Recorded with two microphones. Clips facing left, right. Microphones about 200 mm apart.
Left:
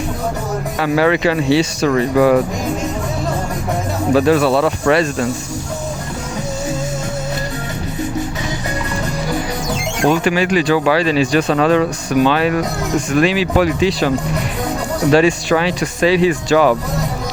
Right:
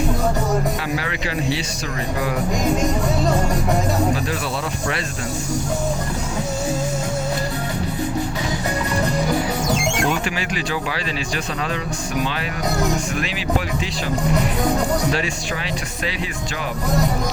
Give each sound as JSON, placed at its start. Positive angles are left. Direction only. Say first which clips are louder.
{"t": 0.8, "sound": "speech", "louder": "left 11 dB", "side_deg": 75}
{"t": 4.1, "sound": "speech", "louder": "left 11 dB", "side_deg": 75}
{"t": 10.1, "sound": "speech", "louder": "left 9 dB", "side_deg": 65}
{"t": 15.1, "sound": "speech", "louder": "left 12 dB", "side_deg": 75}